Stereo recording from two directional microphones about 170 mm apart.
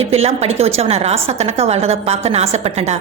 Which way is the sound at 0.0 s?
35° right (ahead or behind).